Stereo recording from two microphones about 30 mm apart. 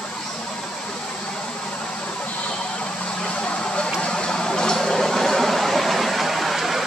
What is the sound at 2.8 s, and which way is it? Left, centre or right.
Vehicle, left.